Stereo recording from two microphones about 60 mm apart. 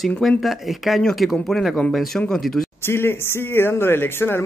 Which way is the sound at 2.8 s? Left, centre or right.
Left.